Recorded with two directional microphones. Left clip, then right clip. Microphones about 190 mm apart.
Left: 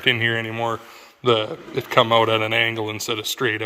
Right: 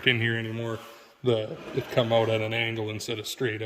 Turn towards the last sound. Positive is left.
turn(degrees=-5)  # may be behind; listen again after turning